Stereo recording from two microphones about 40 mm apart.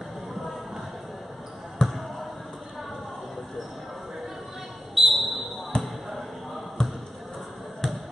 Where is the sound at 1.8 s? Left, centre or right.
Centre.